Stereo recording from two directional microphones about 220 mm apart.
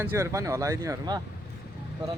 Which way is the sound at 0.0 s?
10° right (ahead or behind).